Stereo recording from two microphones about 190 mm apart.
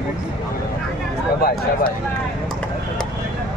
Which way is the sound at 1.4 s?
55° left (ahead or behind).